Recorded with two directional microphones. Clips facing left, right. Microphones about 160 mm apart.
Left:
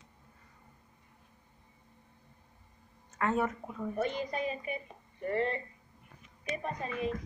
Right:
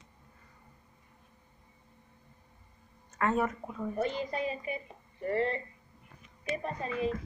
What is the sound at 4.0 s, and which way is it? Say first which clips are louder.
A woman's voice: right 1 dB; 30° right (ahead or behind).